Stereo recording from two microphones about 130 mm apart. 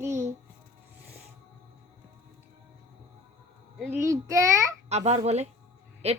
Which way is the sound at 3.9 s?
20° right (ahead or behind).